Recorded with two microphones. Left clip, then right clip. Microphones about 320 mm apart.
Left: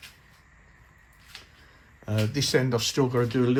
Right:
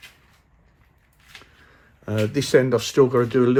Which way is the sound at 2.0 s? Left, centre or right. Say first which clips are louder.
Right 6 dB; right.